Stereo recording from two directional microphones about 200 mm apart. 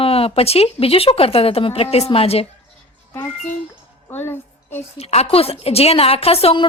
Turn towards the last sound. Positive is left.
turn(degrees=30)  # may be behind; listen again after turning